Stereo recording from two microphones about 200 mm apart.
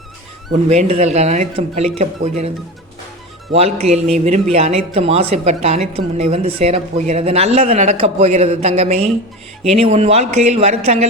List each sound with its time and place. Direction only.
0.7 s speech: 30° right (ahead or behind)
3.5 s speech: 30° right (ahead or behind)